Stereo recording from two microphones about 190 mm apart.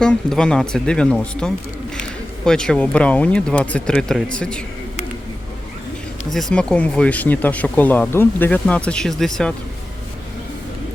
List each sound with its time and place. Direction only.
0.0 s speech: 5° left (ahead or behind)
6.3 s speech: 5° left (ahead or behind)